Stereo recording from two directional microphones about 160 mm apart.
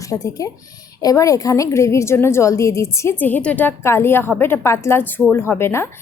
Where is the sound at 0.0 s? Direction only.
20° left (ahead or behind).